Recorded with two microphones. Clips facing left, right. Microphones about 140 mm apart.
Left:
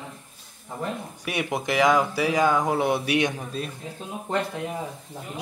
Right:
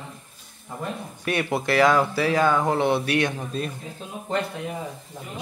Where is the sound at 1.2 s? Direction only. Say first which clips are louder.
Right 3 dB; 10° left (ahead or behind).